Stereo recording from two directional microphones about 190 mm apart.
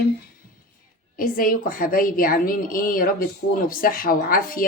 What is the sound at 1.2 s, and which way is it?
Speech, 45° left (ahead or behind).